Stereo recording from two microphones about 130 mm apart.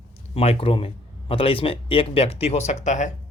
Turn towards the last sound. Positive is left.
turn(degrees=65)  # may be behind; listen again after turning